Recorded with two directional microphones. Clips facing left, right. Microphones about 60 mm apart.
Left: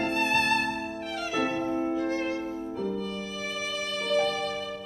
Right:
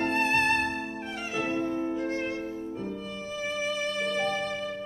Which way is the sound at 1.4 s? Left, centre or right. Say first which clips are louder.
Right 1 dB; left.